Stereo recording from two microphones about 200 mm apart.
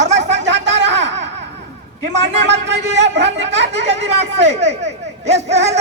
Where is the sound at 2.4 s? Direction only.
60° right (ahead or behind).